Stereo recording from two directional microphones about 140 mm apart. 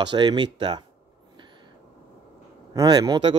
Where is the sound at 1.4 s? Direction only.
35° right (ahead or behind).